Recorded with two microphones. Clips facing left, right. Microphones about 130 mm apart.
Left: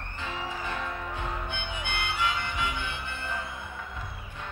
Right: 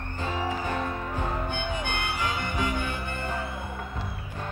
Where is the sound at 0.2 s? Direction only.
40° right (ahead or behind).